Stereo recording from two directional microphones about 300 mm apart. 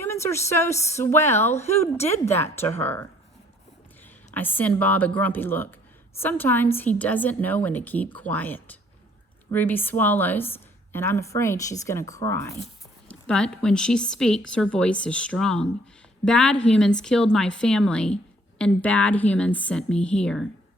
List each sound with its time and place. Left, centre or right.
0.0 s a woman's voice: centre
1.5 s a woman's voice: left
2.3 s a woman's voice: centre
4.4 s a woman's voice: centre